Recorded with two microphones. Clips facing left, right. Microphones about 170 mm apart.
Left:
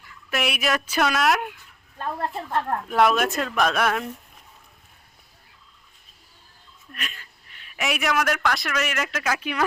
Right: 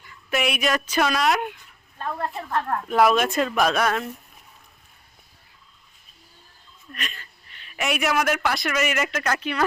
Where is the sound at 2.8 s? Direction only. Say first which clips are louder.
Right 2 dB; centre (ahead or behind).